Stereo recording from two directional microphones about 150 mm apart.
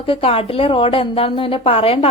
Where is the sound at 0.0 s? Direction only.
40° left (ahead or behind).